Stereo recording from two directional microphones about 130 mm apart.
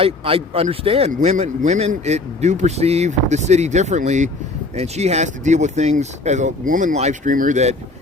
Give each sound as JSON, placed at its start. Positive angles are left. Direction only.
{"t": 0.0, "sound": "speech", "side_deg": -45}